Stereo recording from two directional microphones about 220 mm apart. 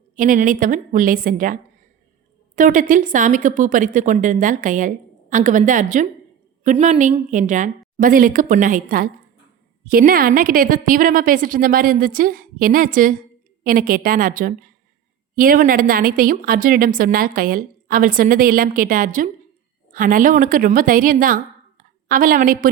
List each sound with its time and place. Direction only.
0.2 s a woman's voice: 35° right (ahead or behind)
2.6 s a woman's voice: 35° right (ahead or behind)